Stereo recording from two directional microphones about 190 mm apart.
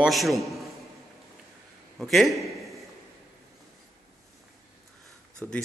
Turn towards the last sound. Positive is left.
turn(degrees=5)  # may be behind; listen again after turning